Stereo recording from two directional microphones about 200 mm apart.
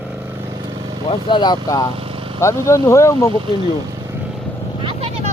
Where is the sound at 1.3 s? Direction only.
20° left (ahead or behind).